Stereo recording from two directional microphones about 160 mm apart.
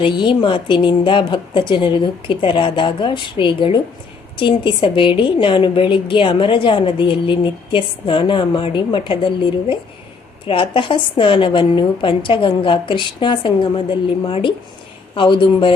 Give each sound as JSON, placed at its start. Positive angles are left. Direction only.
{"t": 0.0, "sound": "a woman's voice", "side_deg": 30}